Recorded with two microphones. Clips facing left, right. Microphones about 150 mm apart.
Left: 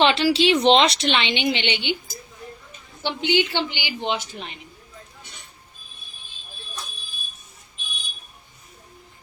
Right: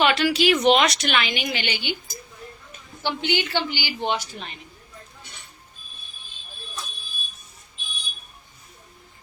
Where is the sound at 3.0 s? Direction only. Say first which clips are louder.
Left 3 dB; 20° left (ahead or behind).